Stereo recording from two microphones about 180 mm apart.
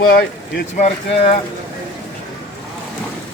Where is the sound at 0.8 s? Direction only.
35° left (ahead or behind).